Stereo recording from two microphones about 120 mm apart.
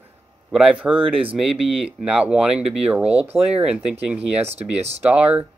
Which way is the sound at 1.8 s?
10° right (ahead or behind).